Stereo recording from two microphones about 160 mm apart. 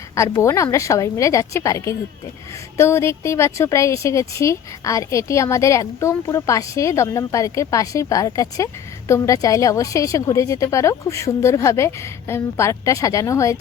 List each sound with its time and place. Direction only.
0.2 s speech: 20° left (ahead or behind)